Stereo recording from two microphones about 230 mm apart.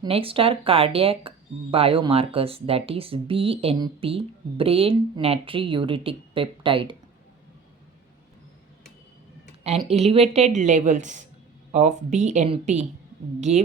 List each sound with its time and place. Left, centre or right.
0.0 s speech: right
9.6 s speech: right